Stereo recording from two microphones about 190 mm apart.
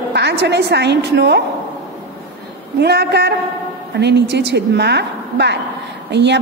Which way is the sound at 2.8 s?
60° right (ahead or behind).